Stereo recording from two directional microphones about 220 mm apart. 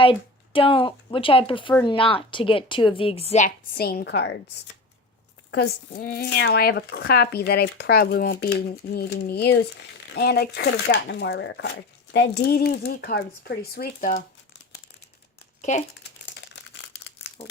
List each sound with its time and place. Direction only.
0.0 s a woman's voice: 25° left (ahead or behind); by 4.4 s 50° left (ahead or behind)
5.5 s speech: 45° left (ahead or behind)
16.2 s crumpling: 55° left (ahead or behind)